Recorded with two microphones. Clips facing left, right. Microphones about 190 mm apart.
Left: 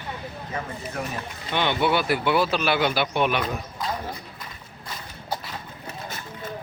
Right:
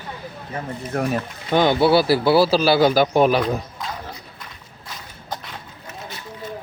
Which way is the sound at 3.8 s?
Centre (ahead or behind).